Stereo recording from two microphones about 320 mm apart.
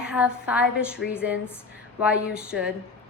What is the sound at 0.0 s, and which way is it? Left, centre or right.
A woman's voice, centre.